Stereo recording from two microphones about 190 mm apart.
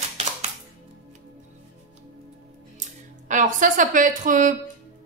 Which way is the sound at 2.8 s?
40° right (ahead or behind).